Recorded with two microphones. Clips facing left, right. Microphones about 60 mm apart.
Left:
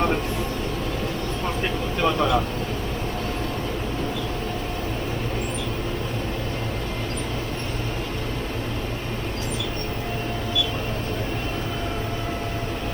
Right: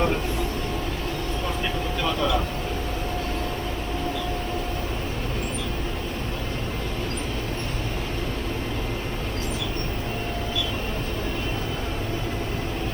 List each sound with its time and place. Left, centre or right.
2.0 s vehicle: left